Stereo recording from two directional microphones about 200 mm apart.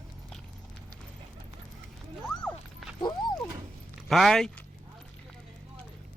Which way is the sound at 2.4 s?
5° left (ahead or behind).